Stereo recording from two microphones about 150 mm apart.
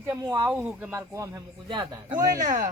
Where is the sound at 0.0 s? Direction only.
20° right (ahead or behind).